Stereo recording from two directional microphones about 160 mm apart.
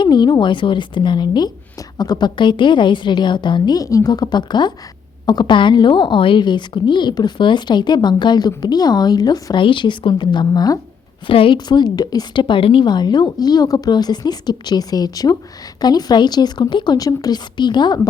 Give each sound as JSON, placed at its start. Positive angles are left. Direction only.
{"t": 0.0, "sound": "a woman's voice", "side_deg": 25}